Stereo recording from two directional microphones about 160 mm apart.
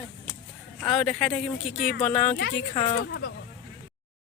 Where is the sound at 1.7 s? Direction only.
80° left.